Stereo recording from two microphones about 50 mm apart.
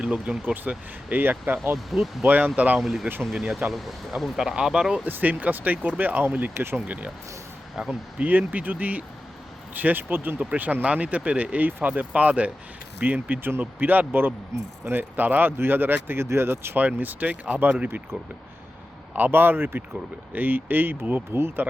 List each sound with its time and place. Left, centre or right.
0.0 s speech: right
0.4 s speech: right
1.7 s speech: centre
2.2 s speech: right
2.8 s speech: centre
5.0 s speech: right
6.8 s speech: right
7.8 s speech: centre
8.2 s speech: right
16.2 s speech: right
16.7 s speech: right
19.1 s speech: right